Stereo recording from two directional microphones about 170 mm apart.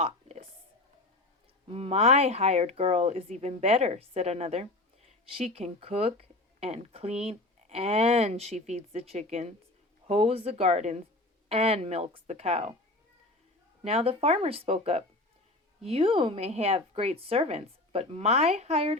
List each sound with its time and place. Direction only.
0.0 s a sound: 40° right (ahead or behind)
1.6 s speech: 35° right (ahead or behind)
13.8 s speech: 35° right (ahead or behind)